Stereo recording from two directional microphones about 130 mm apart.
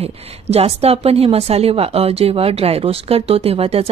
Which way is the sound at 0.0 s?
50° right (ahead or behind).